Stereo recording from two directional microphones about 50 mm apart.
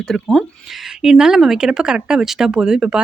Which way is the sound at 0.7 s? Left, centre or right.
Centre.